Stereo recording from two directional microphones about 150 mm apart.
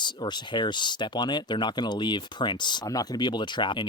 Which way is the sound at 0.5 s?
30° left (ahead or behind).